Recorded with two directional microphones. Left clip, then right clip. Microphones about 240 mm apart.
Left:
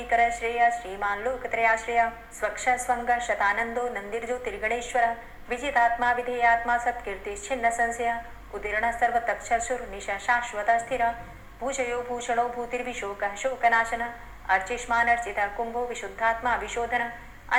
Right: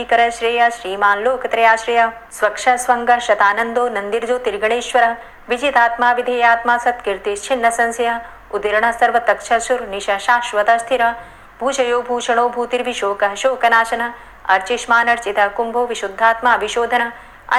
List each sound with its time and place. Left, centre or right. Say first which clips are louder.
0.1 s speech: right 9 dB; right